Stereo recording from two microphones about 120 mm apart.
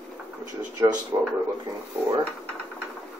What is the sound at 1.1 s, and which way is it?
Speech, 30° right (ahead or behind).